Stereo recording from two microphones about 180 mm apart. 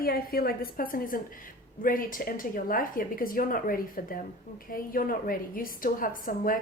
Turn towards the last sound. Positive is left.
turn(degrees=50)  # may be behind; listen again after turning